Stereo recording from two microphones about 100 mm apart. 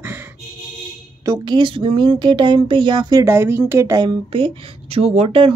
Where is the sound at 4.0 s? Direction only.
55° right (ahead or behind).